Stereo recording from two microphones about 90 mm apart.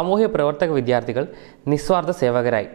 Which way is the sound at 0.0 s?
15° right (ahead or behind).